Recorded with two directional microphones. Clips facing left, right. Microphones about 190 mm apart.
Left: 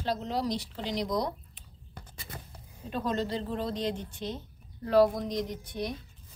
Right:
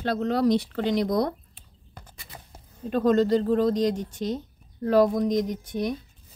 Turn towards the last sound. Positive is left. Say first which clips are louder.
# right 7 dB
turn(degrees=-45)  # may be behind; listen again after turning